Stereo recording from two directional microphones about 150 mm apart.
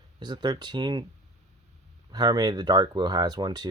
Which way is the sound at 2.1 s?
25° right (ahead or behind).